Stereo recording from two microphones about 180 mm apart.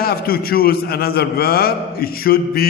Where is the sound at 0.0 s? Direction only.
55° left (ahead or behind).